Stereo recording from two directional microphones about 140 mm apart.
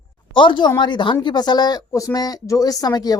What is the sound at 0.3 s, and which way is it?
Speech, 35° left (ahead or behind).